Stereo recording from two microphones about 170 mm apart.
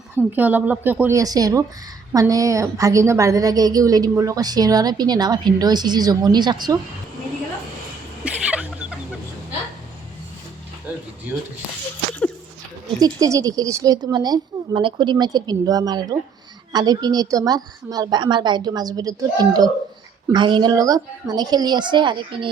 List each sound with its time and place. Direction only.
0.3 s a woman's voice: 10° right (ahead or behind); by 6.7 s 25° right (ahead or behind)
8.2 s a sound: 5° right (ahead or behind)
13.0 s a woman's voice: 20° right (ahead or behind)